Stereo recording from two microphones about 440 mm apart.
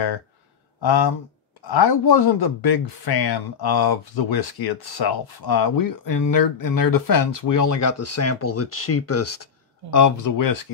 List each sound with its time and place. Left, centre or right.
0.8 s speech: left